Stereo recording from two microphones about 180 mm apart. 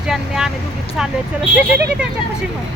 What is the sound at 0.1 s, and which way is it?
Speech, 5° right (ahead or behind).